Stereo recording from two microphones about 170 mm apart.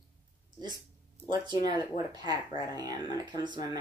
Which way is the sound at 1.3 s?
25° right (ahead or behind).